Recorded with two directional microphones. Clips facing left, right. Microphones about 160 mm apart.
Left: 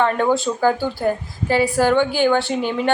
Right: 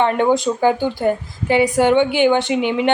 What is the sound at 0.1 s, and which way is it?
A woman's voice, 15° right (ahead or behind).